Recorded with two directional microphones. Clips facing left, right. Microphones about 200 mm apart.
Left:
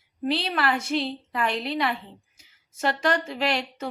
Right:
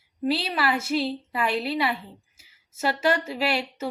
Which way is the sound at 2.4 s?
5° right (ahead or behind).